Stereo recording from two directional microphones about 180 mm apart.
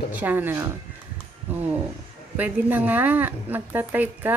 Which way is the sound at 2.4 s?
10° right (ahead or behind).